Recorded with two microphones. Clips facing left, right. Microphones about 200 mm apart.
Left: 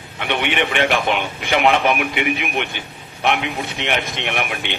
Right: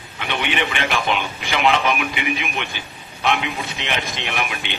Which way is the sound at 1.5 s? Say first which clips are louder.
Left 3 dB; 55° left (ahead or behind).